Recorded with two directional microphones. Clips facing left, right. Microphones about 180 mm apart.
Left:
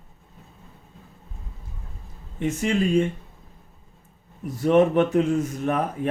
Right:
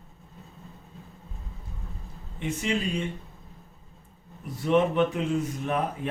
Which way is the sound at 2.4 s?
45° left (ahead or behind).